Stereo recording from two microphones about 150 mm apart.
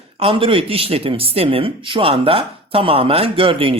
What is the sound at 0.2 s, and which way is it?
Speech, 35° right (ahead or behind).